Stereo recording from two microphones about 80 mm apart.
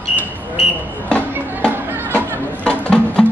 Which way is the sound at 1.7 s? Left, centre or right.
Right.